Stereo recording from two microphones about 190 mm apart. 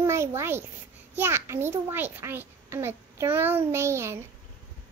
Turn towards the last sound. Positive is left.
turn(degrees=-15)  # may be behind; listen again after turning